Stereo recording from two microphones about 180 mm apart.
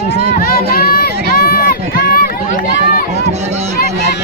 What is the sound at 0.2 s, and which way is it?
Run, 55° left (ahead or behind).